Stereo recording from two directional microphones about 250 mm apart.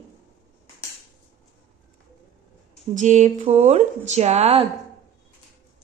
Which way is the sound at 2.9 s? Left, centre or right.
Right.